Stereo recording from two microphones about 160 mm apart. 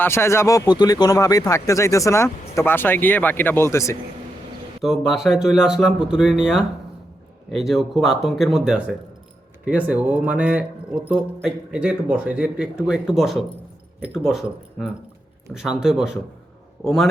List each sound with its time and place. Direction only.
0.0 s speech: 15° left (ahead or behind)
4.8 s speech: centre (ahead or behind)